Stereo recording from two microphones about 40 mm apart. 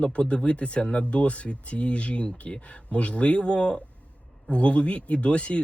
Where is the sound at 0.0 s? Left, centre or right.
Left.